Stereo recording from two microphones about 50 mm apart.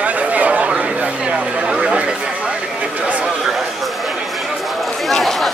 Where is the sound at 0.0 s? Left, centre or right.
Right.